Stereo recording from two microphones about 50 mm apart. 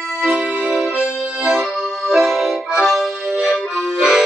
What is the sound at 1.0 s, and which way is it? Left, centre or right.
Accordion, centre.